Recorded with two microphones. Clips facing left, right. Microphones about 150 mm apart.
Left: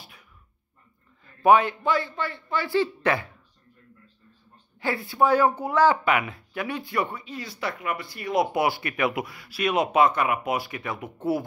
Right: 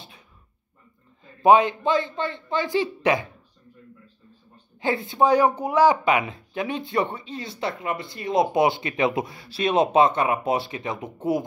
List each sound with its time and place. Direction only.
1.2 s speech: 20° right (ahead or behind)
4.7 s speech: 20° right (ahead or behind)